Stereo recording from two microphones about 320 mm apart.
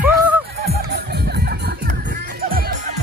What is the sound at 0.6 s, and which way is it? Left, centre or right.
Music, right.